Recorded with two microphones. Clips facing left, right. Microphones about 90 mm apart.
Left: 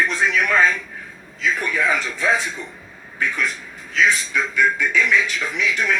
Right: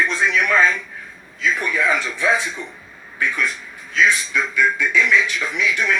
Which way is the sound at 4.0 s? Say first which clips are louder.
Right 1 dB; 35° left (ahead or behind).